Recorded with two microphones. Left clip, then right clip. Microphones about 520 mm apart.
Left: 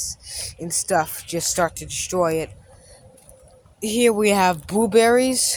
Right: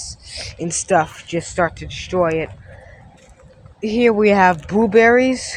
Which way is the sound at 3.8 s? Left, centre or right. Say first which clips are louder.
Right 3 dB; left.